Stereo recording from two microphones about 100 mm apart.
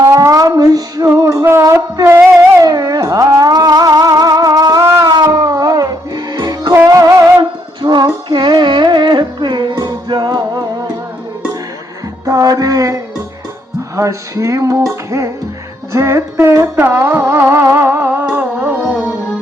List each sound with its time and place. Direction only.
0.0 s female singing: 35° right (ahead or behind)
1.2 s music: 35° right (ahead or behind)
4.8 s a sound: 30° right (ahead or behind)
5.0 s music: 45° right (ahead or behind)
7.8 s music: 45° right (ahead or behind)
12.2 s a sound: 35° right (ahead or behind)
13.9 s music: 30° right (ahead or behind); by 19.1 s 15° right (ahead or behind)